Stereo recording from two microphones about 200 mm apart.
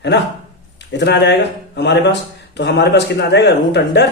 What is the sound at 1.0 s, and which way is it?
Speech, 60° left (ahead or behind).